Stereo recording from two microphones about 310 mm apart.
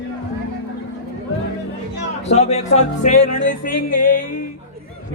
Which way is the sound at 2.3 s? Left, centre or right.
Left.